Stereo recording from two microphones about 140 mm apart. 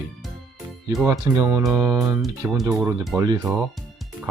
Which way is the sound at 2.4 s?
15° right (ahead or behind).